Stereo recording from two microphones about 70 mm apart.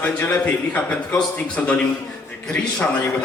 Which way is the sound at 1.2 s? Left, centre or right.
Centre.